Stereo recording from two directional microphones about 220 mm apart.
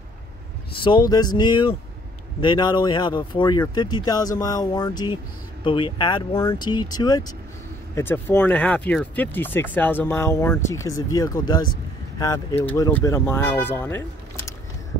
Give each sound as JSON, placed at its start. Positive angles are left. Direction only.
{"t": 0.7, "sound": "speech", "side_deg": 20}